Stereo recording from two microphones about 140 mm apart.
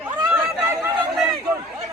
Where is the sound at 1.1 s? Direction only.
Centre (ahead or behind).